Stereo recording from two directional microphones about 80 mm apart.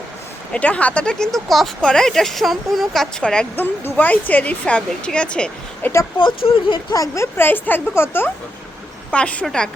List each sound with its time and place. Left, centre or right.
0.5 s speech: centre
3.6 s a woman's voice: left
5.8 s speech: left
6.1 s speech: left
6.9 s speech: left
7.3 s a woman's voice: left
9.1 s speech: centre